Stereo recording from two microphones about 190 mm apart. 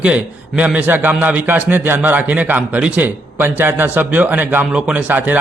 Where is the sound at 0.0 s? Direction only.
5° right (ahead or behind).